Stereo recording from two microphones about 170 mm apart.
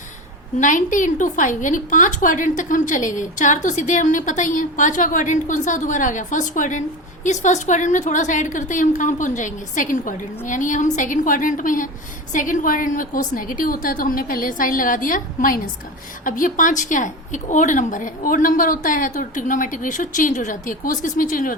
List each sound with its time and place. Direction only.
0.6 s a woman's voice: 50° left (ahead or behind)